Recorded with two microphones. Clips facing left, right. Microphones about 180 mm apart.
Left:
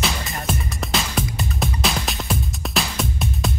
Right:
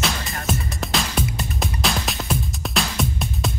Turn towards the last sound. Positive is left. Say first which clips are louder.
# left 1 dB
turn(degrees=0)  # may be behind; listen again after turning